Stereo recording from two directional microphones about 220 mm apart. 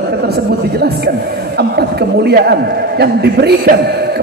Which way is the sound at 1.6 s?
45° right (ahead or behind).